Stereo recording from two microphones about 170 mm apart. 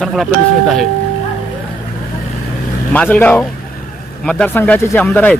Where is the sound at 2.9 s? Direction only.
10° left (ahead or behind).